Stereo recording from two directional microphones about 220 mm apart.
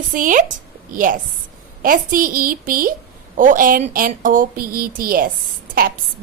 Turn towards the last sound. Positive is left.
turn(degrees=-40)  # may be behind; listen again after turning